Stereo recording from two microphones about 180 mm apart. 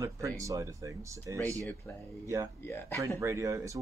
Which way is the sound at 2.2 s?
20° right (ahead or behind).